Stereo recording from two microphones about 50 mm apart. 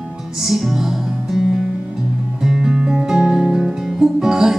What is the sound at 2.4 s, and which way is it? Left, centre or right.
Music, centre.